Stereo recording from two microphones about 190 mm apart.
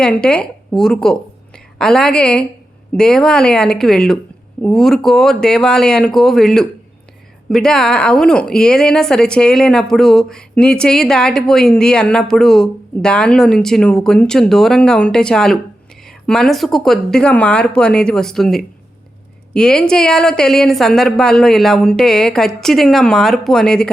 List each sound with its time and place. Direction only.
0.0 s a woman's voice: 5° left (ahead or behind)